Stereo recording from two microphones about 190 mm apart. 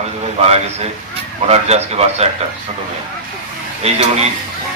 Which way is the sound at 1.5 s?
35° right (ahead or behind).